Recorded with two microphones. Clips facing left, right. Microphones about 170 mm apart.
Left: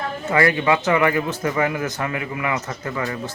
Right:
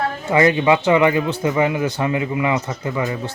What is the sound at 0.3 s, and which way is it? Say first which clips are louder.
Speech: right 3 dB; 20° right (ahead or behind).